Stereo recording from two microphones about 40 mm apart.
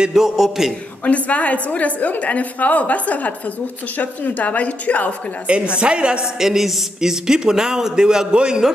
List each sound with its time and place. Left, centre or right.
0.1 s a man's voice: centre
1.0 s a woman's voice: left
5.8 s a woman's voice: right
6.4 s a man's voice: centre